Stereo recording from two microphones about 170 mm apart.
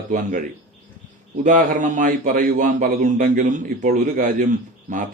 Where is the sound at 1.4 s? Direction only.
50° right (ahead or behind).